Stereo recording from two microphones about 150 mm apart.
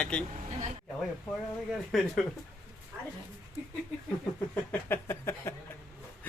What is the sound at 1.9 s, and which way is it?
Speech, centre (ahead or behind).